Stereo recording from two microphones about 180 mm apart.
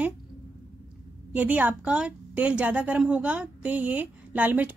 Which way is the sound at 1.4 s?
10° right (ahead or behind).